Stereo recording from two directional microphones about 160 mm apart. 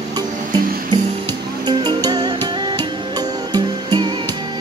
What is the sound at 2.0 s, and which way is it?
Music, 25° right (ahead or behind).